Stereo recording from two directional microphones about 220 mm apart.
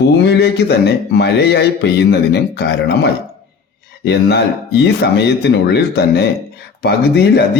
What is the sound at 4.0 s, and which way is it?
Speech, 50° left (ahead or behind).